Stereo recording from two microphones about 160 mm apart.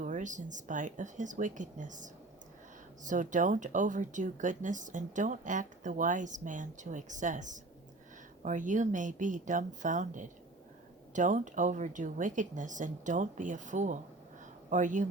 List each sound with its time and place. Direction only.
0.0 s speech: 50° right (ahead or behind)